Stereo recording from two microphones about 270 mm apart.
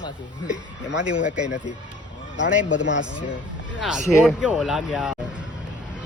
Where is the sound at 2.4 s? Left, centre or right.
Left.